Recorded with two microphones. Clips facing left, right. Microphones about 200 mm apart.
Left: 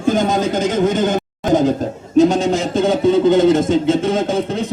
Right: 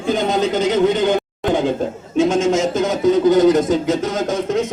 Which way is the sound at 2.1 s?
35° left (ahead or behind).